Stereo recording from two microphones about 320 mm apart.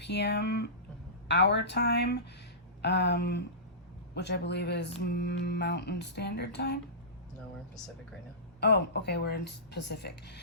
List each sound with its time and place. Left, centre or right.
0.0 s speech: left
8.6 s speech: left